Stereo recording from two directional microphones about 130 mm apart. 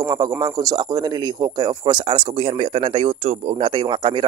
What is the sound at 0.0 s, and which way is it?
Speech, 30° right (ahead or behind).